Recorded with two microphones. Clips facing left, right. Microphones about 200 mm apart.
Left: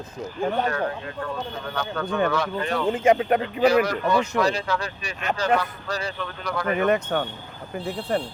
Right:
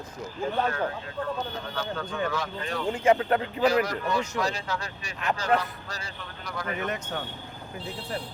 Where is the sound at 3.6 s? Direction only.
70° left (ahead or behind); by 8.3 s 55° left (ahead or behind).